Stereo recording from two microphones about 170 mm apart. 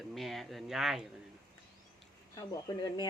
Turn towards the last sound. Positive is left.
turn(degrees=20)  # may be behind; listen again after turning